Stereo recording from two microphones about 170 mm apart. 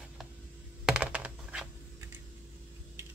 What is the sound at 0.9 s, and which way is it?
Computer keyboard, 5° right (ahead or behind).